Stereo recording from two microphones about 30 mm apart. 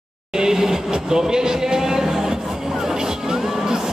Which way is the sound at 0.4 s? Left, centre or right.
Centre.